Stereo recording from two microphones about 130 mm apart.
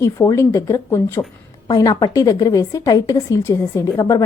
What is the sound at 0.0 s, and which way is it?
A woman's voice, 20° left (ahead or behind).